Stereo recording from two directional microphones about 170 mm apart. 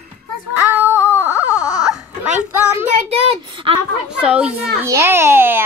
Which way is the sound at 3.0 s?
35° right (ahead or behind).